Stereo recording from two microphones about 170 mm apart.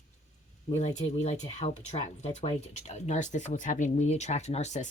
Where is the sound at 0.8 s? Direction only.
40° left (ahead or behind).